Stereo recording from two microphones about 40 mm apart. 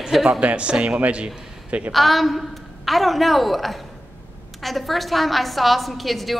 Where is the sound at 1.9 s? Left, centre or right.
Centre.